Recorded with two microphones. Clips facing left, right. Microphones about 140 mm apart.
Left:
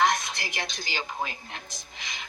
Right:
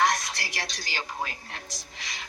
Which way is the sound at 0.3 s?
20° left (ahead or behind).